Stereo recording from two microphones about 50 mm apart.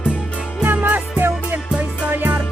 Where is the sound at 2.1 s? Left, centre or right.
Right.